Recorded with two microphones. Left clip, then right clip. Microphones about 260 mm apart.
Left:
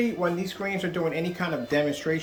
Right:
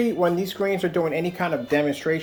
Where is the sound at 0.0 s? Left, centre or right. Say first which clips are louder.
Right 5 dB; right.